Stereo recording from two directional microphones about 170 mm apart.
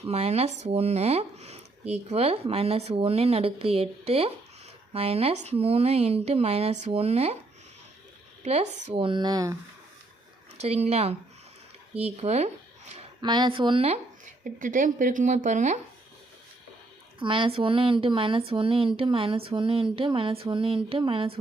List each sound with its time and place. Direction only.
0.1 s speech: 40° right (ahead or behind)
8.4 s speech: 35° right (ahead or behind); by 9.6 s 20° right (ahead or behind)
10.6 s speech: 40° right (ahead or behind)
13.2 s speech: 25° right (ahead or behind)
14.4 s speech: 50° right (ahead or behind)
17.2 s speech: 30° right (ahead or behind)